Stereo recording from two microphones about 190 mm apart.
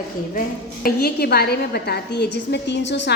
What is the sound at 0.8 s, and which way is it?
A woman's voice, 55° left (ahead or behind).